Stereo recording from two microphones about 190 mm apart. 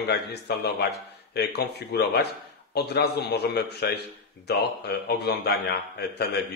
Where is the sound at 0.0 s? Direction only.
60° left (ahead or behind).